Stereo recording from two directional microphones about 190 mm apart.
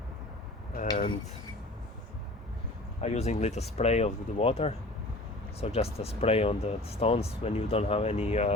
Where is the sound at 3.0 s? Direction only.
35° left (ahead or behind).